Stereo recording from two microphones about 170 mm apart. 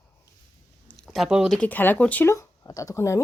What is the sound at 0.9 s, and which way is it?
Speech, centre (ahead or behind).